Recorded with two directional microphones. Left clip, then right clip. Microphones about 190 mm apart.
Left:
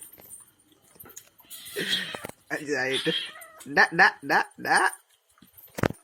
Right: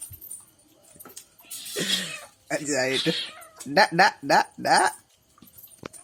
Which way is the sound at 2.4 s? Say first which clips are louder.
Right 3 dB; 20° right (ahead or behind).